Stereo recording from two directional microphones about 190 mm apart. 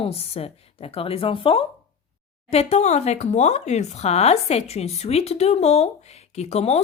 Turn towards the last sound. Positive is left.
turn(degrees=35)  # may be behind; listen again after turning